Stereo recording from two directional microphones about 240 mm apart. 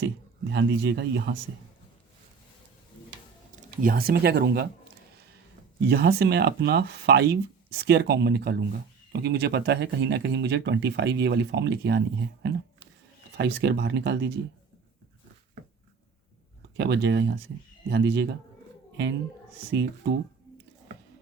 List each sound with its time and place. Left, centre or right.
0.5 s speech: right
3.5 s speech: right
5.9 s speech: right
16.7 s speech: right
19.7 s speech: right